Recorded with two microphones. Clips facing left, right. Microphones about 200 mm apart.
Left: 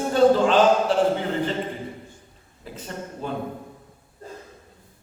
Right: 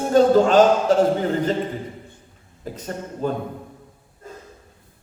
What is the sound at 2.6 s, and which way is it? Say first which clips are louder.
Speech: right 4 dB; 45° right (ahead or behind).